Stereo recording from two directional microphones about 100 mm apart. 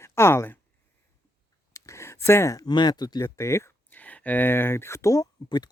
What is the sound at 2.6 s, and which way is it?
Speech, 45° left (ahead or behind).